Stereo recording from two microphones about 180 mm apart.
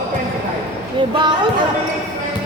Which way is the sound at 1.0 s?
25° right (ahead or behind).